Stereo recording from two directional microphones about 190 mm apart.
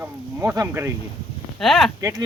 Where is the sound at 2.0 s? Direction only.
15° right (ahead or behind).